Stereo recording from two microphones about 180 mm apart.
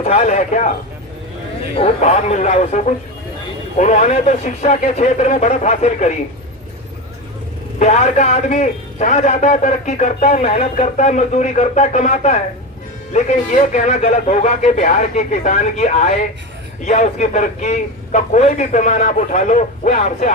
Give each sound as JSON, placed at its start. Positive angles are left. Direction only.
{"t": 0.0, "sound": "a man's voice", "side_deg": 35}
{"t": 1.7, "sound": "a man's voice", "side_deg": 35}
{"t": 7.8, "sound": "a man's voice", "side_deg": 35}